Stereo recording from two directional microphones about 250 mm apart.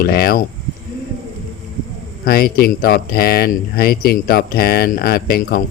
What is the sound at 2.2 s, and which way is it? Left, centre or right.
Speech, left.